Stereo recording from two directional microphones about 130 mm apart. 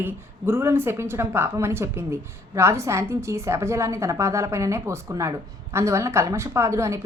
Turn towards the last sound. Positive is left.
turn(degrees=-20)  # may be behind; listen again after turning